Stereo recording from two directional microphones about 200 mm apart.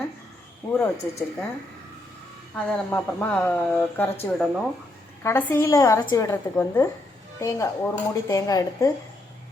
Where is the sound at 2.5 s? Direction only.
10° left (ahead or behind).